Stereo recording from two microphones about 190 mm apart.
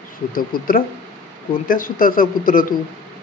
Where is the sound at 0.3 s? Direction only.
50° left (ahead or behind).